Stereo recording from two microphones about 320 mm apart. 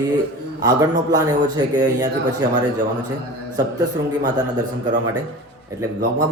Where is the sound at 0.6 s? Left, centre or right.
Centre.